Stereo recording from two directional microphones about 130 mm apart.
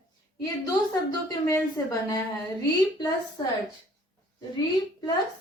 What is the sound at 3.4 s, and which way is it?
Speech, 30° left (ahead or behind).